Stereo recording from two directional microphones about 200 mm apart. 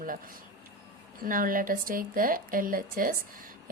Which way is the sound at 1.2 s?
45° right (ahead or behind).